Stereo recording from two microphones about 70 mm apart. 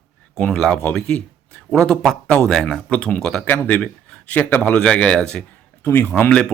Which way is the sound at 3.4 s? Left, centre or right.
Left.